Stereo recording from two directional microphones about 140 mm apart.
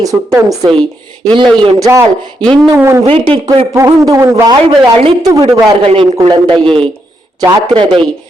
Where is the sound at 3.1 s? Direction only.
40° right (ahead or behind).